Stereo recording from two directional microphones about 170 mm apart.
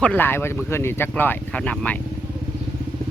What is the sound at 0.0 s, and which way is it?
Speech, 10° left (ahead or behind).